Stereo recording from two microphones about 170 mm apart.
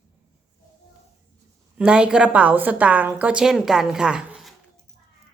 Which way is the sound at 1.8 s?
5° right (ahead or behind).